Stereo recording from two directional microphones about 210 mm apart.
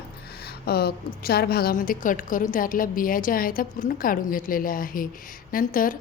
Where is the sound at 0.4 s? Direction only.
50° left (ahead or behind).